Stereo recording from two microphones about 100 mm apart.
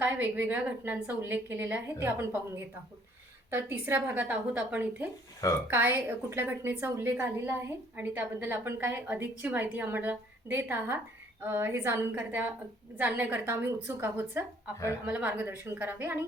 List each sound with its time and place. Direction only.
0.0 s a woman's voice: 15° right (ahead or behind)